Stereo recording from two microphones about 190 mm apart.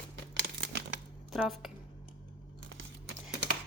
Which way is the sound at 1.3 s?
Centre (ahead or behind).